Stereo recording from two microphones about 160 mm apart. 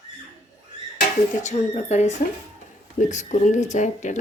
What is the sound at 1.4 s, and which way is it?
Speech, 45° left (ahead or behind).